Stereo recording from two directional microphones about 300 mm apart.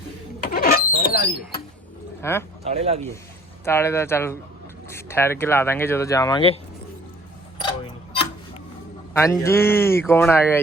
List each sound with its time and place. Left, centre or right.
0.4 s a sound: left
2.2 s speech: centre
2.6 s speech: right
3.6 s speech: centre
7.6 s tick-tock: centre
9.1 s speech: centre